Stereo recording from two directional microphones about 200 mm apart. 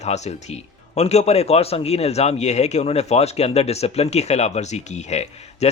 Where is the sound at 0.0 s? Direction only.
35° left (ahead or behind).